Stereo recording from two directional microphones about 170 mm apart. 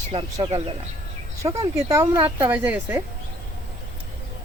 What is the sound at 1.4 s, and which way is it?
Speech, 15° right (ahead or behind).